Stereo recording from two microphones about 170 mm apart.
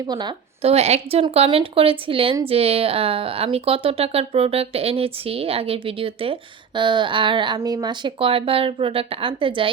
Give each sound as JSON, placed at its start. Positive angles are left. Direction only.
{"t": 0.1, "sound": "a woman's voice", "side_deg": -25}
{"t": 0.6, "sound": "speech", "side_deg": -40}